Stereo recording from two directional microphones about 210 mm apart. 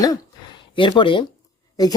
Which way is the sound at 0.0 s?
20° left (ahead or behind).